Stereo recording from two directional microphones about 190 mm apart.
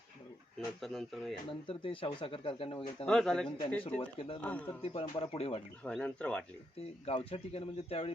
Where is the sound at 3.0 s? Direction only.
5° left (ahead or behind).